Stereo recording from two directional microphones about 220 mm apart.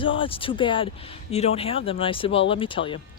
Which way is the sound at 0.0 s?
25° left (ahead or behind).